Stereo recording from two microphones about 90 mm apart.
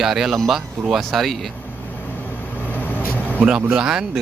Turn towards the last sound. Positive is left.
turn(degrees=-10)  # may be behind; listen again after turning